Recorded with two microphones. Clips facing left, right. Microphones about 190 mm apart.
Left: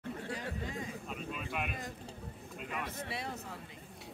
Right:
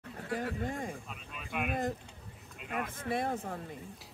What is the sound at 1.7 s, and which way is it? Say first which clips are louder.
Speech: right 9 dB; 50° right (ahead or behind).